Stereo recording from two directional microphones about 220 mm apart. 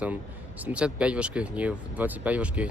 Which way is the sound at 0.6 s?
5° right (ahead or behind).